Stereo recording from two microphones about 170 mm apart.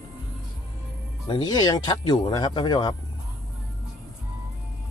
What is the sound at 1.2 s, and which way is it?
Speech, 25° left (ahead or behind).